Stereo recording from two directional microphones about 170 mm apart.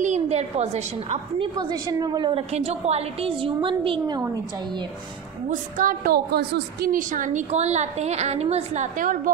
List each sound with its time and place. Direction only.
0.0 s a woman's voice: 40° right (ahead or behind)
1.7 s a woman's voice: 20° right (ahead or behind)
2.5 s a woman's voice: 40° right (ahead or behind)
5.5 s a woman's voice: 50° right (ahead or behind)